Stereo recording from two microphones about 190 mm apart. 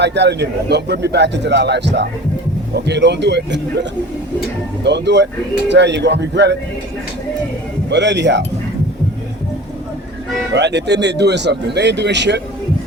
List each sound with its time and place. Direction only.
0.0 s speech: 65° right (ahead or behind)
7.9 s speech: 65° right (ahead or behind)
10.5 s speech: 65° right (ahead or behind)